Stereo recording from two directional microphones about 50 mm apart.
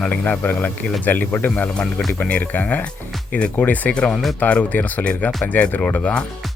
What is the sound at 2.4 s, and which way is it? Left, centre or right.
Speech, left.